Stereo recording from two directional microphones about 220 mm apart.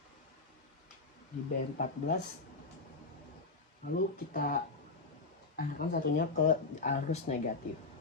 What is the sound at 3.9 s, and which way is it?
Speech, 40° left (ahead or behind).